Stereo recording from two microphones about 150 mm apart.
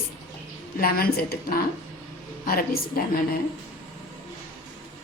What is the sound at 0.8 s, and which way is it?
A woman's voice, 90° left.